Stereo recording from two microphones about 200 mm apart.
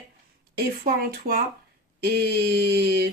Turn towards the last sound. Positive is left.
turn(degrees=-55)  # may be behind; listen again after turning